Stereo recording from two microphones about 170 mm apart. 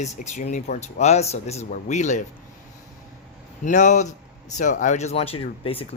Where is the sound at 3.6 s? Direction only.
45° left (ahead or behind).